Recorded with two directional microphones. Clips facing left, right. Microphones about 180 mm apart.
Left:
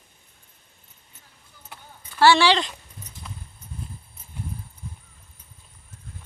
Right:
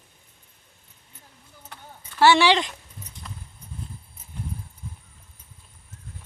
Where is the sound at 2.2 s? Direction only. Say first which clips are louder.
Even; 15° right (ahead or behind).